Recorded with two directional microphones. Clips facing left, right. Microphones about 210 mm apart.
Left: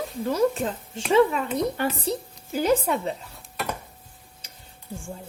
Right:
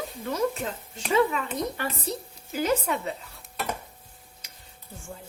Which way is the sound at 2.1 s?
30° left (ahead or behind).